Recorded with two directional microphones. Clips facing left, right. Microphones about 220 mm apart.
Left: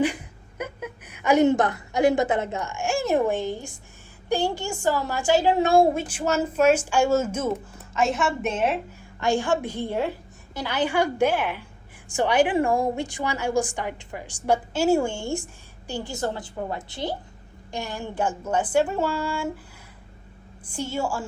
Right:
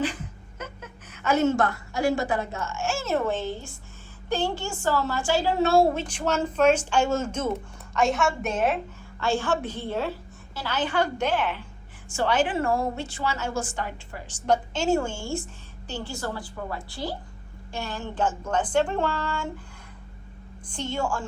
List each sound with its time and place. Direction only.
0.0 s a woman's voice: 15° left (ahead or behind)
9.2 s a woman's voice: 15° left (ahead or behind)
20.7 s a woman's voice: 10° left (ahead or behind)